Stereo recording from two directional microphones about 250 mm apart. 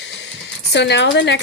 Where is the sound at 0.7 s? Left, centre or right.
Left.